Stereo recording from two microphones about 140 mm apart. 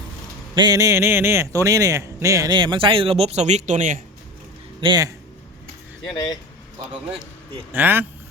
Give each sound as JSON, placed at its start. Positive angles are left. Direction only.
{"t": 0.5, "sound": "a man's voice", "side_deg": -30}
{"t": 4.8, "sound": "a man's voice", "side_deg": -30}
{"t": 6.1, "sound": "speech", "side_deg": 30}
{"t": 7.7, "sound": "speech", "side_deg": -15}